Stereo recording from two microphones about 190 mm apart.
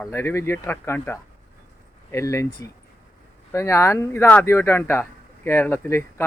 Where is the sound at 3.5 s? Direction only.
15° left (ahead or behind).